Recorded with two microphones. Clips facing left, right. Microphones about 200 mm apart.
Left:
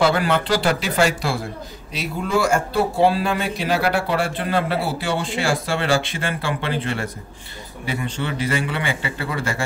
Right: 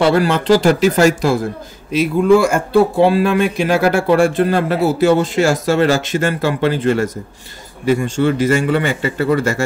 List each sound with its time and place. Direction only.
0.0 s speech: 40° right (ahead or behind)